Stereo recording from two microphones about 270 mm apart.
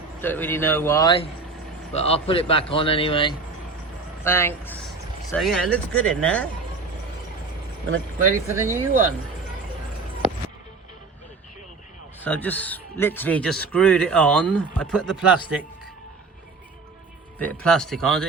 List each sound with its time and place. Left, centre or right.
0.2 s a man's voice: centre
8.4 s speech: centre
12.2 s a man's voice: centre
17.3 s a man's voice: centre